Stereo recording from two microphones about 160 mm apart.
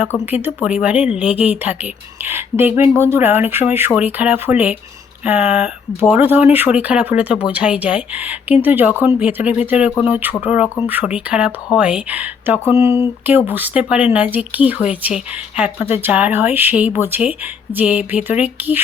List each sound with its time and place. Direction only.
0.4 s speech: 10° right (ahead or behind)